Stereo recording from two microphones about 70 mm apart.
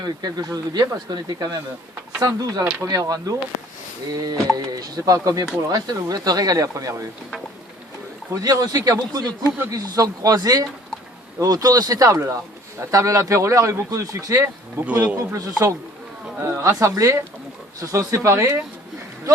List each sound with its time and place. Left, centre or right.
0.0 s speech: right
2.2 s speech: right
8.3 s speech: right
15.4 s speech: right
16.4 s speech: right